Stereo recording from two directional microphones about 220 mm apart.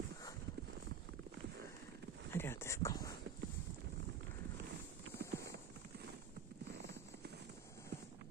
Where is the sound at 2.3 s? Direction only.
10° left (ahead or behind).